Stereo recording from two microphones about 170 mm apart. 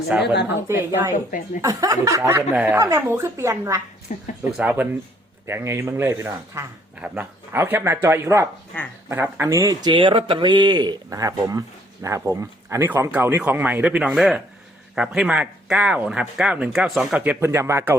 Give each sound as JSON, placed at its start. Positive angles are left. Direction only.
{"t": 0.1, "sound": "speech", "side_deg": -10}
{"t": 4.1, "sound": "speech", "side_deg": 45}
{"t": 4.5, "sound": "speech", "side_deg": -10}